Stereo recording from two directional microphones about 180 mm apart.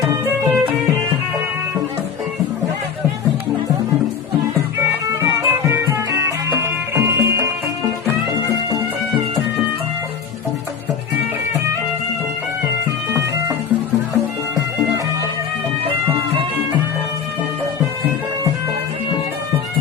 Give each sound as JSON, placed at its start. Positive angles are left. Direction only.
{"t": 0.0, "sound": "music", "side_deg": -15}
{"t": 5.0, "sound": "music", "side_deg": -15}